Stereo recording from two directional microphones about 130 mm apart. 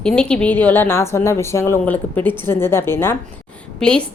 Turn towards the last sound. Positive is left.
turn(degrees=5)  # may be behind; listen again after turning